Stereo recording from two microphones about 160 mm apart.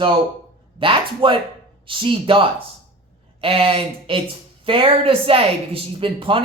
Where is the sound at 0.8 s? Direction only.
35° right (ahead or behind).